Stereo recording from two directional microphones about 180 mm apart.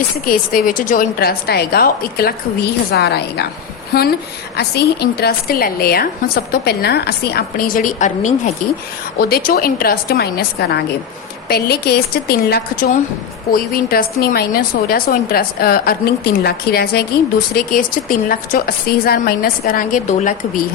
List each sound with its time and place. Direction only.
0.3 s a woman's voice: 50° left (ahead or behind)
4.5 s a woman's voice: 65° left (ahead or behind); by 8.5 s 40° left (ahead or behind)
9.1 s a woman's voice: 55° left (ahead or behind)